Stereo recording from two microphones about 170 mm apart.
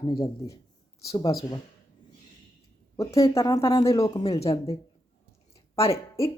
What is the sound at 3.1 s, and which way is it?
Speech, 20° left (ahead or behind).